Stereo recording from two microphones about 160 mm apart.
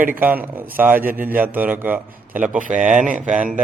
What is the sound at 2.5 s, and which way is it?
Speech, 55° right (ahead or behind).